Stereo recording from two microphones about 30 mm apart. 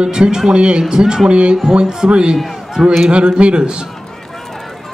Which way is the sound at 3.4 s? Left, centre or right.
Right.